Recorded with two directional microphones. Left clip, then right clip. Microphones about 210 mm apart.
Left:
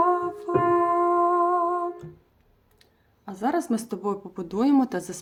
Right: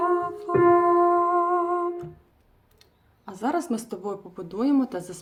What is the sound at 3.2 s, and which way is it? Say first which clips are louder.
Speech: left 1 dB; 20° left (ahead or behind).